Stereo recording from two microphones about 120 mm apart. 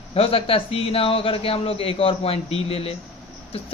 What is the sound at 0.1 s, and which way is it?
A woman's voice, 55° left (ahead or behind).